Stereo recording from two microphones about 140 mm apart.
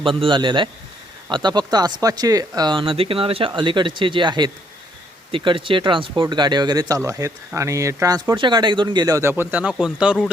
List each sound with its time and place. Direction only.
0.0 s speech: 40° right (ahead or behind); by 10.2 s 5° right (ahead or behind)